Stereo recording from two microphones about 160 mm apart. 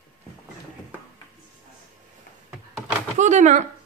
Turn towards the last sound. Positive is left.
turn(degrees=-50)  # may be behind; listen again after turning